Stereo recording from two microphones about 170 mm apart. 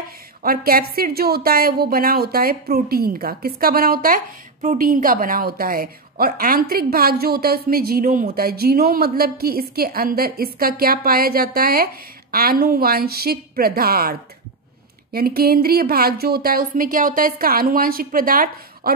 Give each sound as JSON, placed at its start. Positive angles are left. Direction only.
{"t": 0.4, "sound": "a woman's voice", "side_deg": -60}
{"t": 15.1, "sound": "a woman's voice", "side_deg": -60}